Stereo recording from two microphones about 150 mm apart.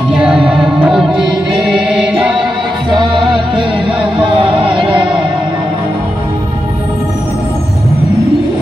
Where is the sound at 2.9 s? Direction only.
30° right (ahead or behind).